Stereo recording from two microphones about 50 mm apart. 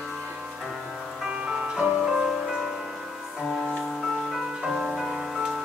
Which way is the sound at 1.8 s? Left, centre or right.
Centre.